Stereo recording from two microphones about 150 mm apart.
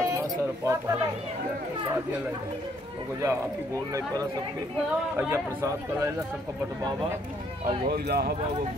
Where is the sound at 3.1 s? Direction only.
20° right (ahead or behind).